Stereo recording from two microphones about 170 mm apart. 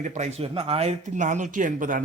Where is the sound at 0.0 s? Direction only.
45° right (ahead or behind).